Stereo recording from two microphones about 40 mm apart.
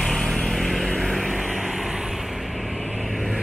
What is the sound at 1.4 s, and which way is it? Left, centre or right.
Vehicle, centre.